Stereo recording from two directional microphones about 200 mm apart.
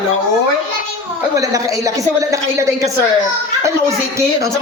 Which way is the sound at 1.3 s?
15° right (ahead or behind).